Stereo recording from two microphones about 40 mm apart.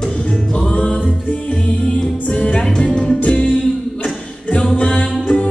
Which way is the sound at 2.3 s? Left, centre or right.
Left.